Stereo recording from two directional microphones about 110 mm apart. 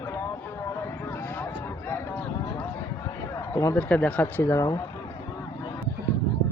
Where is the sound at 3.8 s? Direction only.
15° left (ahead or behind); by 4.8 s 30° left (ahead or behind).